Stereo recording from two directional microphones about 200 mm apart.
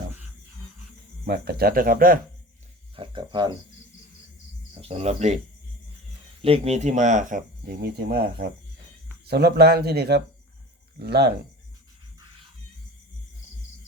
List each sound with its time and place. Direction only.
1.2 s speech: 55° right (ahead or behind)
2.9 s speech: 25° right (ahead or behind)
4.8 s speech: 30° right (ahead or behind)
6.4 s speech: 30° right (ahead or behind); by 11.3 s 55° right (ahead or behind)